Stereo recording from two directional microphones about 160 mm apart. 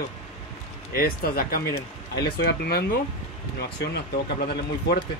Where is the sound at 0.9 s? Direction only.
70° left (ahead or behind).